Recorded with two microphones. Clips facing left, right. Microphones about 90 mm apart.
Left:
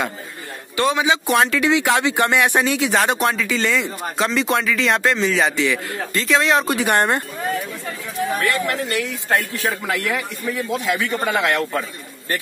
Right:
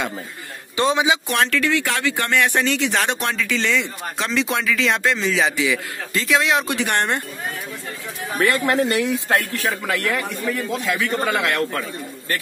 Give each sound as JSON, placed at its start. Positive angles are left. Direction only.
{"t": 0.7, "sound": "a man's voice", "side_deg": -20}
{"t": 1.3, "sound": "speech", "side_deg": 10}
{"t": 8.6, "sound": "a man's voice", "side_deg": -30}
{"t": 10.0, "sound": "a man's voice", "side_deg": 10}